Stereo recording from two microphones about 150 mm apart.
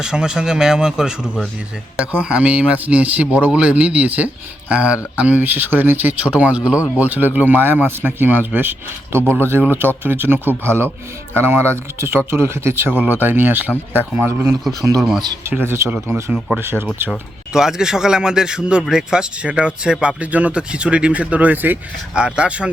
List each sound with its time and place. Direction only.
0.0 s a man's voice: 5° right (ahead or behind)
17.1 s a man's voice: 5° right (ahead or behind)